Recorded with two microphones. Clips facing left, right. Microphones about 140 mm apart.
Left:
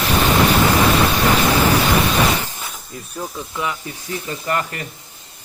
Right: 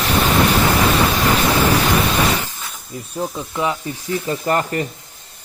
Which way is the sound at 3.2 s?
30° right (ahead or behind).